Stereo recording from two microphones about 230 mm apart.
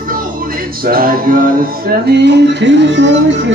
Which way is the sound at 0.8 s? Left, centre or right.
Right.